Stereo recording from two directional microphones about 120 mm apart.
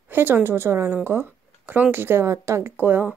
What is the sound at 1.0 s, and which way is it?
Speech, 20° right (ahead or behind).